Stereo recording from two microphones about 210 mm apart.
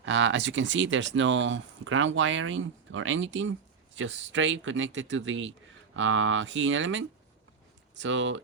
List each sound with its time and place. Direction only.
0.0 s speech: 60° right (ahead or behind)